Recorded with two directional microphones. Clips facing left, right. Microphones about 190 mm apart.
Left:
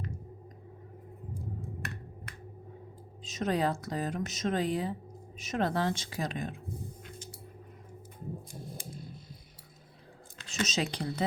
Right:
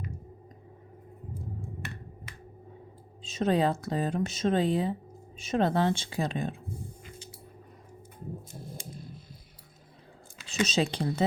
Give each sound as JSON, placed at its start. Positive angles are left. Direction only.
{"t": 3.2, "sound": "speech", "side_deg": -30}
{"t": 10.7, "sound": "speech", "side_deg": -30}